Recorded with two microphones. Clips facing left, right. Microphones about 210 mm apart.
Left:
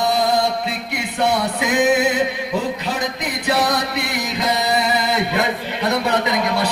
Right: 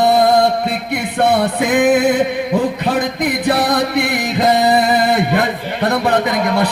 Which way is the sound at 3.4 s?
55° right (ahead or behind).